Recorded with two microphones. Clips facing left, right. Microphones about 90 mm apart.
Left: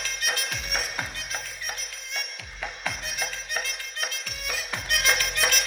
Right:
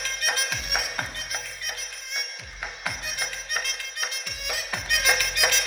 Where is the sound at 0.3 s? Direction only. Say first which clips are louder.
Right 2 dB; 25° right (ahead or behind).